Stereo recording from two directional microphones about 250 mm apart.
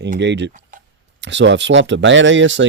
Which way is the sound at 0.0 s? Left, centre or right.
Right.